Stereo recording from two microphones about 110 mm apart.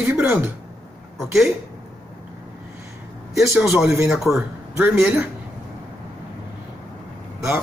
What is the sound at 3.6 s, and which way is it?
Speech, 5° right (ahead or behind).